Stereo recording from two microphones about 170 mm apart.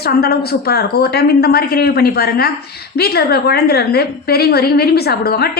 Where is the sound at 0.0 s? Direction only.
65° left (ahead or behind).